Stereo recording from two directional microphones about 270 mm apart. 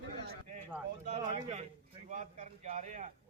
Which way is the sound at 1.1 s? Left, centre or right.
Right.